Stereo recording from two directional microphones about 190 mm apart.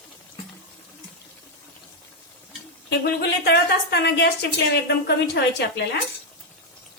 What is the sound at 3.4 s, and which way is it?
A woman's voice, 60° left (ahead or behind).